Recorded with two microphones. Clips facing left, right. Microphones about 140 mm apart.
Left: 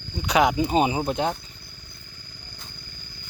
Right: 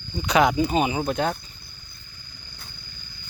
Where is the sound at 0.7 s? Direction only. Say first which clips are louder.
Left 1 dB; 30° left (ahead or behind).